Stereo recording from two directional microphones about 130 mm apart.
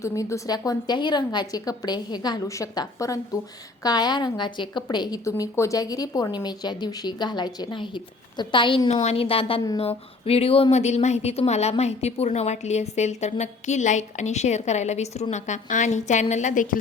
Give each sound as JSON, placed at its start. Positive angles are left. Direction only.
{"t": 0.0, "sound": "a woman's voice", "side_deg": 20}
{"t": 5.2, "sound": "a woman's voice", "side_deg": 25}
{"t": 8.9, "sound": "a woman's voice", "side_deg": 55}